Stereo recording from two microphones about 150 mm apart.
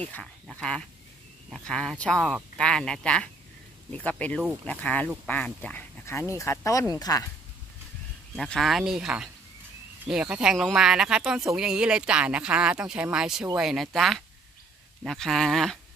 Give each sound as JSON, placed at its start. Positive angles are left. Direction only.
{"t": 0.6, "sound": "speech", "side_deg": 5}
{"t": 8.4, "sound": "speech", "side_deg": 0}